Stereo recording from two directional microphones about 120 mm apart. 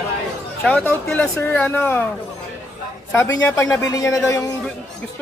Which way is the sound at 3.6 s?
30° left (ahead or behind).